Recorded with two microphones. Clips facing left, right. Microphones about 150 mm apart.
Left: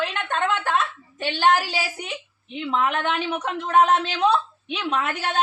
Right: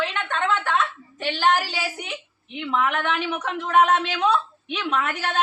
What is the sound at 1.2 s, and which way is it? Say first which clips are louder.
Speech: left 2 dB; 35° left (ahead or behind).